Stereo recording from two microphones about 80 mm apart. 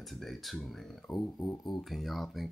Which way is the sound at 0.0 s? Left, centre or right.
Centre.